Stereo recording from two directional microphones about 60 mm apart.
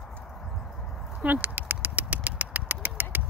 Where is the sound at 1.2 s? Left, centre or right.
Right.